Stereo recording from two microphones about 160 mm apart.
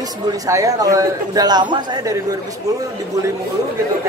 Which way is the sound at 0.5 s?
20° right (ahead or behind).